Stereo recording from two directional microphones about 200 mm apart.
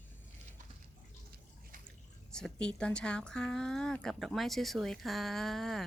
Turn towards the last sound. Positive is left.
turn(degrees=0)  # may be behind; listen again after turning